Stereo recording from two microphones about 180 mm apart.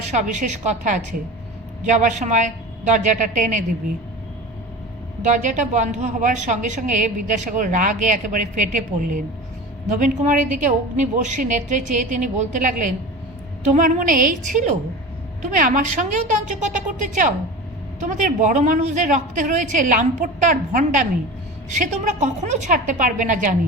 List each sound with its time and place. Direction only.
0.1 s a woman's voice: 40° right (ahead or behind)
5.2 s a woman's voice: 45° right (ahead or behind)